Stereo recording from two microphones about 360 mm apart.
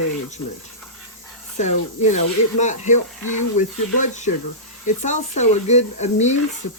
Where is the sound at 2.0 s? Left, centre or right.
Centre.